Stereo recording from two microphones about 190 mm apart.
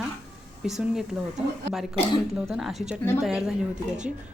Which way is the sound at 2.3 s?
Centre (ahead or behind).